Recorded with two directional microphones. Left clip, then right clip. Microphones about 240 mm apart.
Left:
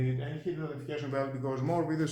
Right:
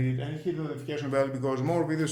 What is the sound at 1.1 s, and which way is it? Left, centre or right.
Speech, right.